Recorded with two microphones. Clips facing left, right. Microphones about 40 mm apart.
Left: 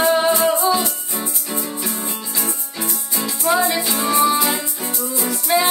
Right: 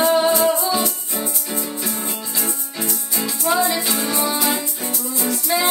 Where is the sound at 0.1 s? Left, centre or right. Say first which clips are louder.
Even; left.